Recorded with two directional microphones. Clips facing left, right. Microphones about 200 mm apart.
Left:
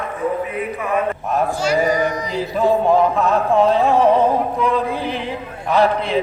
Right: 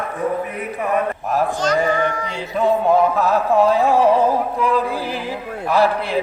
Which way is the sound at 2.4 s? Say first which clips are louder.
Left 1 dB; centre (ahead or behind).